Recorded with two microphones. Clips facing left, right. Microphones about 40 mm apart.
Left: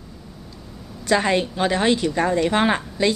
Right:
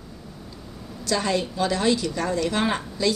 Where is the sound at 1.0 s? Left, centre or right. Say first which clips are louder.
Left 5 dB; left.